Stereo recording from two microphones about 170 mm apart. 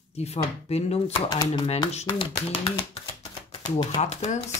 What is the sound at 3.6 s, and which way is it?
Speech, 45° left (ahead or behind).